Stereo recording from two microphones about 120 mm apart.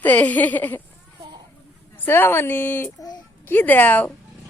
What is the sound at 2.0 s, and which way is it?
A woman's voice, 20° left (ahead or behind).